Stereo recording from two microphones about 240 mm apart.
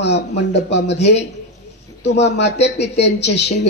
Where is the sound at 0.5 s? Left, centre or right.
Left.